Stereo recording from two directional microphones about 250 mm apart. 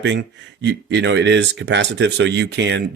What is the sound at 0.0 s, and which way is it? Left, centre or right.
Speech, right.